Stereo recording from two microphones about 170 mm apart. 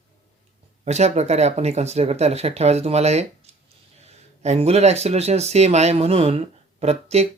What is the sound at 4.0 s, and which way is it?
Speech, 40° right (ahead or behind).